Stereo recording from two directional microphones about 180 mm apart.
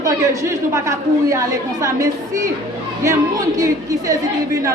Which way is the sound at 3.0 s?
15° right (ahead or behind).